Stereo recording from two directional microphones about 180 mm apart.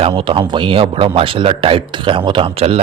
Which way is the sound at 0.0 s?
30° right (ahead or behind).